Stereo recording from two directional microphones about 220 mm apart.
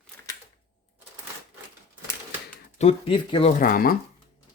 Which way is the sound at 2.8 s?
25° left (ahead or behind).